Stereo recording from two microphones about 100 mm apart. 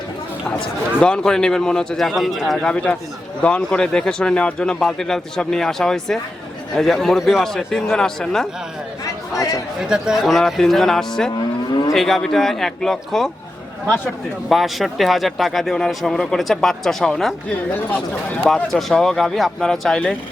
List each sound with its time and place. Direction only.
1.0 s a man's voice: 5° left (ahead or behind)
9.3 s speech: 35° left (ahead or behind)
9.8 s speech: 5° right (ahead or behind)
14.5 s speech: centre (ahead or behind)
18.4 s speech: 5° left (ahead or behind)